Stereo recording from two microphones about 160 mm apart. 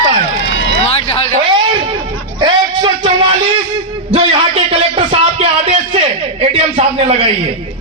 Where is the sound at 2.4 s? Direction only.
30° right (ahead or behind).